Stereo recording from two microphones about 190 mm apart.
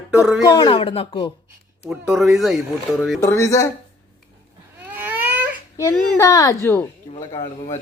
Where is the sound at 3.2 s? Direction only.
15° left (ahead or behind).